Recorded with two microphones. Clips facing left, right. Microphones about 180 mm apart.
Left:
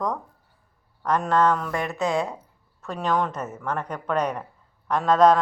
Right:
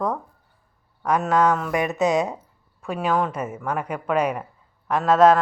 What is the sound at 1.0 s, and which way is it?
Speech, 10° right (ahead or behind).